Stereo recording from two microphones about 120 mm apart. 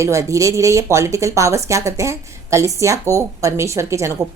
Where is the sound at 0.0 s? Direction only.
25° right (ahead or behind).